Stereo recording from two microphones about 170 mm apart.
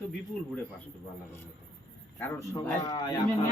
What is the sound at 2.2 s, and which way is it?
A man's voice, 20° left (ahead or behind).